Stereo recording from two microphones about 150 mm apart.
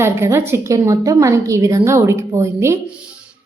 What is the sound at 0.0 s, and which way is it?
A woman's voice, 15° right (ahead or behind).